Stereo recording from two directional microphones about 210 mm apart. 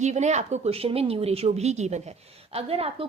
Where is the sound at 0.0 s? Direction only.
35° right (ahead or behind).